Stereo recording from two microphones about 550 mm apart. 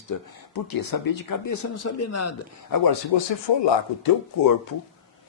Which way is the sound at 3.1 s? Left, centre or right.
Left.